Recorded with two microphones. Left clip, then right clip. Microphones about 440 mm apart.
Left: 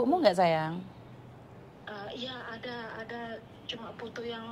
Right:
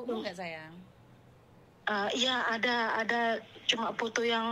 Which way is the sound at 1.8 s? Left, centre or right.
Right.